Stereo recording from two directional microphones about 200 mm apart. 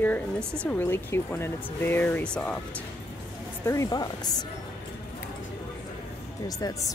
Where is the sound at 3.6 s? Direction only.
15° left (ahead or behind).